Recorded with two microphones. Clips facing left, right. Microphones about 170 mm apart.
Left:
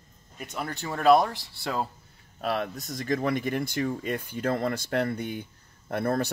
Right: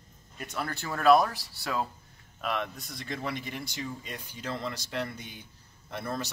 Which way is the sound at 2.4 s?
35° left (ahead or behind).